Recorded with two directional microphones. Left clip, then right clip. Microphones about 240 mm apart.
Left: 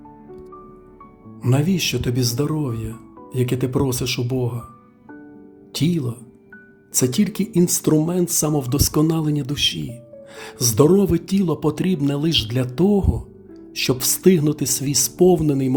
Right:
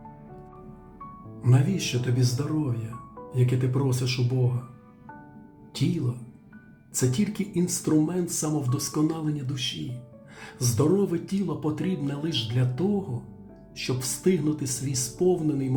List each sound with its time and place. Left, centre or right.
1.4 s speech: left
5.7 s speech: left